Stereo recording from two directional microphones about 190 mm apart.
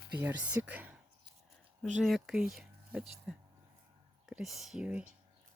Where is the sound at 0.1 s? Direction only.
10° right (ahead or behind).